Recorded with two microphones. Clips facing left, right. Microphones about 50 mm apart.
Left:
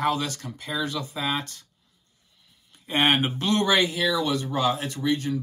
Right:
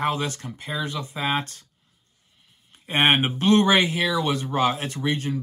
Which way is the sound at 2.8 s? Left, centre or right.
Right.